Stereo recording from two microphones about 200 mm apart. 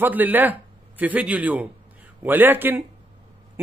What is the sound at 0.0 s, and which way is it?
A man's voice, 10° right (ahead or behind).